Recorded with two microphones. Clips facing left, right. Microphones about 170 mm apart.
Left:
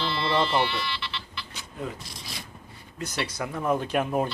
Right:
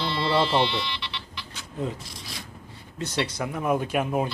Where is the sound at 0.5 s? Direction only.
20° right (ahead or behind).